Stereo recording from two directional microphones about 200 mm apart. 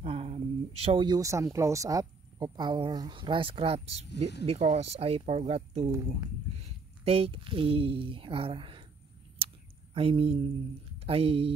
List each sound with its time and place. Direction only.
0.0 s speech: 30° right (ahead or behind)
5.9 s speech: 15° right (ahead or behind)
7.1 s speech: 30° right (ahead or behind)
9.4 s a sound: 30° right (ahead or behind)
9.9 s speech: 30° right (ahead or behind)